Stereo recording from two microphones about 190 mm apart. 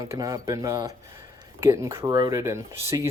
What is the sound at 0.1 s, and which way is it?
Speech, 15° right (ahead or behind).